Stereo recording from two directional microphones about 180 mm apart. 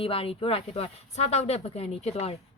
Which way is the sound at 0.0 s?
30° left (ahead or behind).